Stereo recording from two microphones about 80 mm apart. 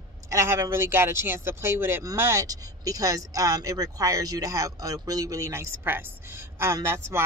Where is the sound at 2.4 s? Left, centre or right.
Right.